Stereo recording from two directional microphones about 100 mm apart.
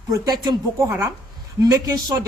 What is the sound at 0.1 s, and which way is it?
Speech, 45° right (ahead or behind).